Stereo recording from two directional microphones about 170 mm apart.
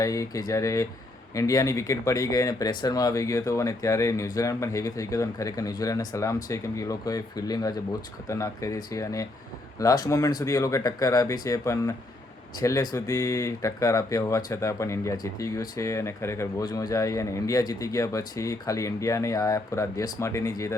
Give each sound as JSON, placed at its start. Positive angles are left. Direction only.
{"t": 0.0, "sound": "speech", "side_deg": 20}